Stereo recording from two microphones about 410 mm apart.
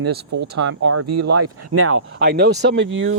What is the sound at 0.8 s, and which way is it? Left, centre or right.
Speech, right.